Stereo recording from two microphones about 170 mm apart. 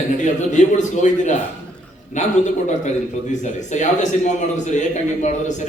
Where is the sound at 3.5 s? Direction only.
45° left (ahead or behind).